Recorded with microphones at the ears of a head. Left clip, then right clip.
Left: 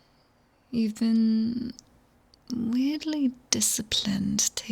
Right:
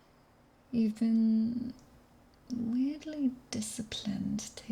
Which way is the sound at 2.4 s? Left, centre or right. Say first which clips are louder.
Left 6 dB; left.